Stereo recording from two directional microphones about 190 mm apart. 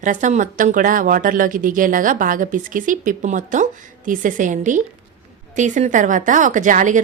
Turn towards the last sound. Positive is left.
turn(degrees=-40)  # may be behind; listen again after turning